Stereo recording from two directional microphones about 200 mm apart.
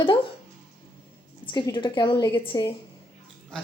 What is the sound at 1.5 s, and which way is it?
A woman's voice, 20° left (ahead or behind).